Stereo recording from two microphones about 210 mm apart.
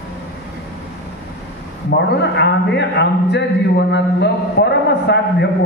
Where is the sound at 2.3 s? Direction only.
55° left (ahead or behind).